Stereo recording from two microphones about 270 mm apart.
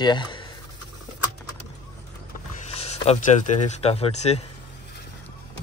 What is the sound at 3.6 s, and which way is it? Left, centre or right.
Speech, left.